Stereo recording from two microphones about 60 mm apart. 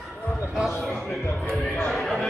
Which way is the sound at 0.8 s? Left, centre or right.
Left.